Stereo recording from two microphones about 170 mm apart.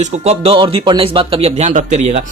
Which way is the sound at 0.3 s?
35° right (ahead or behind).